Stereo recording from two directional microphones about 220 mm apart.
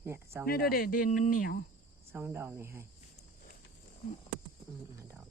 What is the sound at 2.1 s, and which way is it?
Speech, 10° right (ahead or behind).